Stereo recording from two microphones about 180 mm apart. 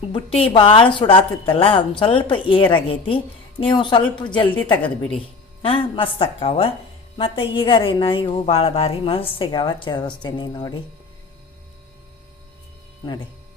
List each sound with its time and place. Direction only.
0.1 s a woman's voice: 30° left (ahead or behind)